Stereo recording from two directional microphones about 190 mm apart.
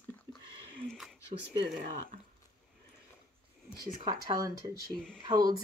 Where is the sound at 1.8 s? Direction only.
45° right (ahead or behind).